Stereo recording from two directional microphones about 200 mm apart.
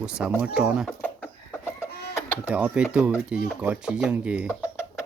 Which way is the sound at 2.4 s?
5° right (ahead or behind).